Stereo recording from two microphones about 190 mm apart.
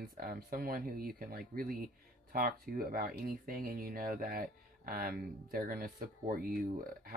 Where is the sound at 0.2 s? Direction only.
50° right (ahead or behind).